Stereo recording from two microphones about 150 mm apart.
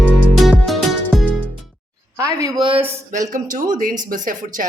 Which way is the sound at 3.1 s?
55° right (ahead or behind).